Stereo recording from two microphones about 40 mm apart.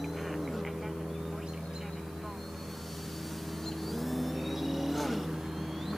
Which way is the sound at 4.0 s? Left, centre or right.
Centre.